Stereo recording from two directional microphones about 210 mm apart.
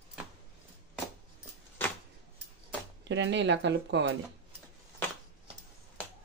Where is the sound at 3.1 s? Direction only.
60° right (ahead or behind).